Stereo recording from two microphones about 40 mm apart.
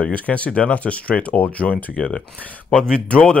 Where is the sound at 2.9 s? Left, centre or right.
Left.